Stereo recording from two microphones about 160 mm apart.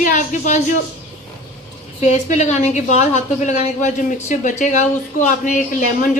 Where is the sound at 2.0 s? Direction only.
45° left (ahead or behind).